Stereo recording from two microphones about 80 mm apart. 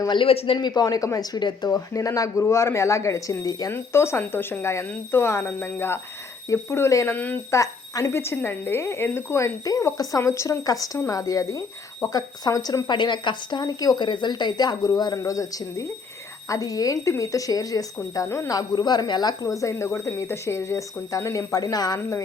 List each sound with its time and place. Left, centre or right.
0.1 s speech: left
0.7 s speech: left
1.7 s speech: left
3.7 s speech: left
10.6 s speech: left
12.9 s a woman's voice: left
15.2 s speech: left
18.5 s speech: left